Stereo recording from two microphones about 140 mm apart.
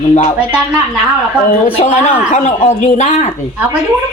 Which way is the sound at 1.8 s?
55° left (ahead or behind).